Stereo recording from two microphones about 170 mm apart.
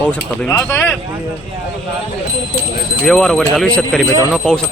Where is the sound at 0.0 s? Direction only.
5° left (ahead or behind).